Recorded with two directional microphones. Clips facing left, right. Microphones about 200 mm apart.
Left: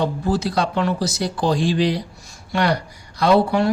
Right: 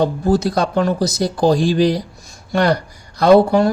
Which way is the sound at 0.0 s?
40° right (ahead or behind).